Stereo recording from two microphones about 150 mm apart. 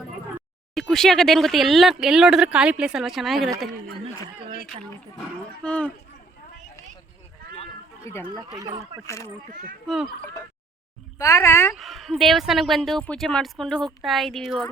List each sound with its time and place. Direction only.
0.7 s a woman's voice: centre (ahead or behind)
5.6 s speech: 10° left (ahead or behind)
8.0 s speech: 15° left (ahead or behind)
8.4 s speech: 25° right (ahead or behind)
9.0 s speech: 20° left (ahead or behind)
9.8 s a woman's voice: centre (ahead or behind)
11.2 s speech: 20° left (ahead or behind)
11.7 s a woman's voice: centre (ahead or behind)